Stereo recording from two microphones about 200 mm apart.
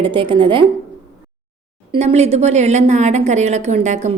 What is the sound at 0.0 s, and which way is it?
Speech, 25° right (ahead or behind).